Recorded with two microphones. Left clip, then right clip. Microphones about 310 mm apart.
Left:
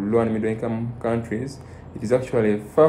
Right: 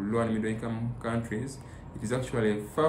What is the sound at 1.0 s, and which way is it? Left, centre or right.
Speech, centre.